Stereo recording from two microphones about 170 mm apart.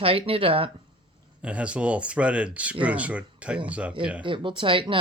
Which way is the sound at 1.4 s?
5° right (ahead or behind).